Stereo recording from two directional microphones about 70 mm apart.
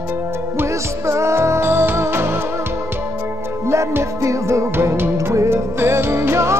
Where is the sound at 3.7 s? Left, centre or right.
Right.